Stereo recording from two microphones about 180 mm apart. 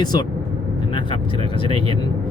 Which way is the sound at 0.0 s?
25° left (ahead or behind).